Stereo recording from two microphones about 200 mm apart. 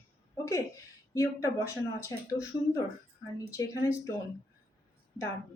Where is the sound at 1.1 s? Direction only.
15° left (ahead or behind).